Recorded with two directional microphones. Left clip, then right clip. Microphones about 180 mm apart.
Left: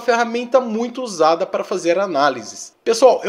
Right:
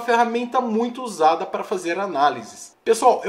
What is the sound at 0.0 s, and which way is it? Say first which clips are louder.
Speech: left 1 dB; 30° left (ahead or behind).